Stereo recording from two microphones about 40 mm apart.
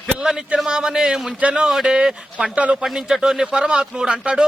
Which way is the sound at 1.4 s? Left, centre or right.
Right.